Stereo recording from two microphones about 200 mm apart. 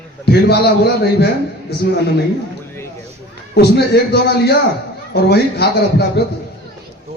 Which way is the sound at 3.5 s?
55° left (ahead or behind).